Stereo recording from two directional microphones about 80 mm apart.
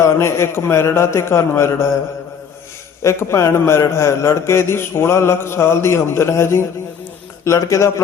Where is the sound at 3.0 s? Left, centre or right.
Left.